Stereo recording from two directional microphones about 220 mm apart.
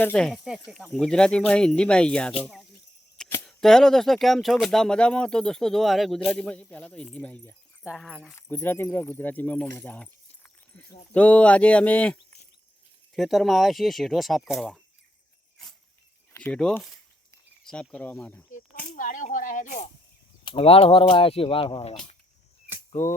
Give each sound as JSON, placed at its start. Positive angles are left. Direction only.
{"t": 0.0, "sound": "speech", "side_deg": 5}
{"t": 13.1, "sound": "speech", "side_deg": 0}
{"t": 16.3, "sound": "speech", "side_deg": 5}
{"t": 18.9, "sound": "speech", "side_deg": 40}
{"t": 20.4, "sound": "speech", "side_deg": 25}